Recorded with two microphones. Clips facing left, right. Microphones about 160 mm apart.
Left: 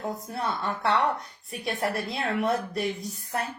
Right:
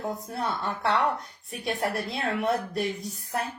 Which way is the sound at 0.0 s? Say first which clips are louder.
Even; centre (ahead or behind).